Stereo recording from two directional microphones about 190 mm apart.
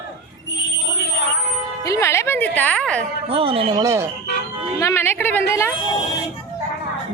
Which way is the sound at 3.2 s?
30° right (ahead or behind).